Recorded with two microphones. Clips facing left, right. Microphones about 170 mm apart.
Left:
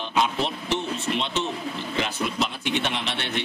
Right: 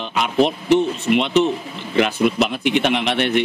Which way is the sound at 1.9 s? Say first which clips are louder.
Right 11 dB; 60° right (ahead or behind).